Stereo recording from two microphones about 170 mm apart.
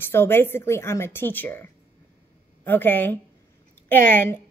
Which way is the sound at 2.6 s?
10° left (ahead or behind).